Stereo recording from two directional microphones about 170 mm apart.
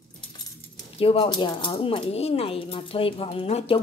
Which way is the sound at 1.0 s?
35° left (ahead or behind).